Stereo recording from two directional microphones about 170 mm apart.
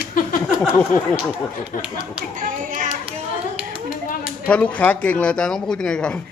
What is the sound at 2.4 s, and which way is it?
Clapping, 50° right (ahead or behind).